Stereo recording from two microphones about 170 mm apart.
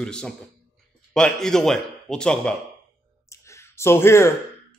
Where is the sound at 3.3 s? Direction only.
15° left (ahead or behind).